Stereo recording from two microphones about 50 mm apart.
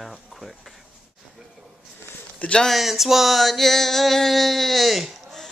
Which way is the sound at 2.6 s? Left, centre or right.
Centre.